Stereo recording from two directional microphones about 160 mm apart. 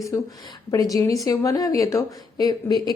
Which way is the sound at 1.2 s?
20° left (ahead or behind).